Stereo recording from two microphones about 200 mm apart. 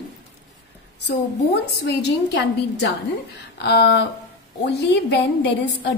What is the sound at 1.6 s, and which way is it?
A woman's voice, 60° left (ahead or behind).